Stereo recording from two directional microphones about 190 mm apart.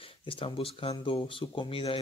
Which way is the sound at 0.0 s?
25° left (ahead or behind).